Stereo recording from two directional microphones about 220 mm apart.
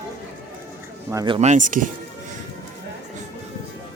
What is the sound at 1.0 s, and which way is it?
Speech, 20° right (ahead or behind).